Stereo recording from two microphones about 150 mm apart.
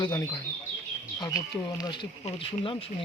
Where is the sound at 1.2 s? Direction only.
25° left (ahead or behind).